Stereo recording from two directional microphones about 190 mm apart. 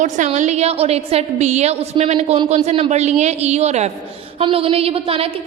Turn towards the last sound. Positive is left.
turn(degrees=-30)  # may be behind; listen again after turning